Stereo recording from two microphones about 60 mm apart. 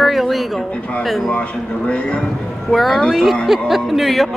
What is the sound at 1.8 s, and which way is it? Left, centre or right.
Speech, centre.